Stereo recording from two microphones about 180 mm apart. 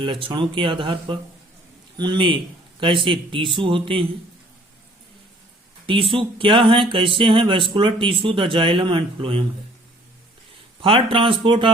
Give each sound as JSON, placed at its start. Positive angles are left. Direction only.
{"t": 0.0, "sound": "speech", "side_deg": -30}
{"t": 5.8, "sound": "speech", "side_deg": -30}
{"t": 10.8, "sound": "speech", "side_deg": -30}